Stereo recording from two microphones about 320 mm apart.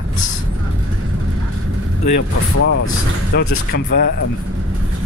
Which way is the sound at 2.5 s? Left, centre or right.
Left.